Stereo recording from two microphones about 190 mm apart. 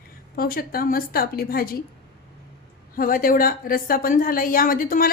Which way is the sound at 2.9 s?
50° left (ahead or behind).